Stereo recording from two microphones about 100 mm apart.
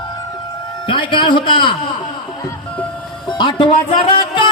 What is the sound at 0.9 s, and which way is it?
Speech, 55° left (ahead or behind).